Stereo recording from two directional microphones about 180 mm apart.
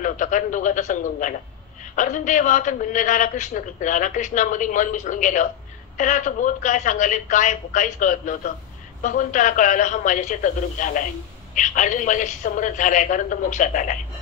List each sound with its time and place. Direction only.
0.0 s a man's voice: 45° left (ahead or behind)